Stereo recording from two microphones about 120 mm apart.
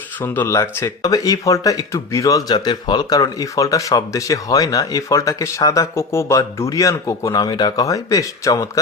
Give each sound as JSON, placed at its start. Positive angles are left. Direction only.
{"t": 0.2, "sound": "speech", "side_deg": 15}
{"t": 0.5, "sound": "speech", "side_deg": 25}